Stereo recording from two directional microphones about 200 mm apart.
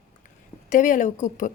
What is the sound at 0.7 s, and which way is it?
Speech, 40° left (ahead or behind).